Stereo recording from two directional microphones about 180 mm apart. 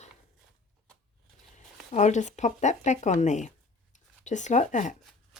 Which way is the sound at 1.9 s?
40° left (ahead or behind).